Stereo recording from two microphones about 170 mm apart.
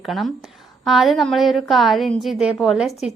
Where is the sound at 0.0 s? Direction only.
Centre (ahead or behind).